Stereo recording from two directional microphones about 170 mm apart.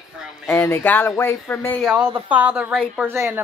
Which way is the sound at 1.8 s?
10° right (ahead or behind).